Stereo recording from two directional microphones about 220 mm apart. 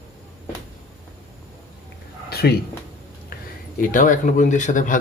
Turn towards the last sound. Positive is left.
turn(degrees=35)  # may be behind; listen again after turning